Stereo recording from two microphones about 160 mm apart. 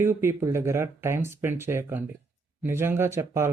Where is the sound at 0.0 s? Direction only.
15° right (ahead or behind).